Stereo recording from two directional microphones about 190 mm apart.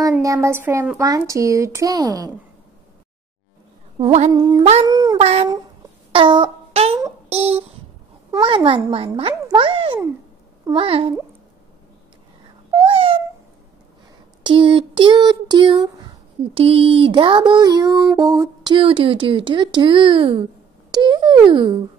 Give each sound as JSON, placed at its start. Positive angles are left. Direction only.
{"t": 0.2, "sound": "speech", "side_deg": -15}
{"t": 4.3, "sound": "child singing", "side_deg": -20}
{"t": 5.2, "sound": "speech", "side_deg": -35}
{"t": 6.1, "sound": "a sound", "side_deg": -25}
{"t": 8.3, "sound": "child singing", "side_deg": -25}
{"t": 10.6, "sound": "a child's voice", "side_deg": -25}
{"t": 12.8, "sound": "a sound", "side_deg": -30}
{"t": 14.4, "sound": "child singing", "side_deg": -25}